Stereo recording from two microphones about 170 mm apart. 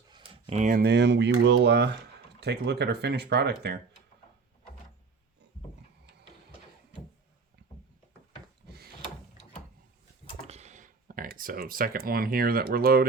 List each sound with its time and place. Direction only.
0.1 s a sound: 30° right (ahead or behind)
0.6 s speech: 60° right (ahead or behind); by 2.0 s 90° right
2.4 s speech: 80° right
8.6 s gears: 70° right (ahead or behind)
10.4 s speech: 40° right (ahead or behind); by 13.1 s 60° right (ahead or behind)